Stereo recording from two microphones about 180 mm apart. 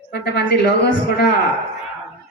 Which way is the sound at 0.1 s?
65° left (ahead or behind).